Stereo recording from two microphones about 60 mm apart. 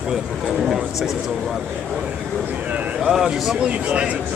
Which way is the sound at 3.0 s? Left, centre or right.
Centre.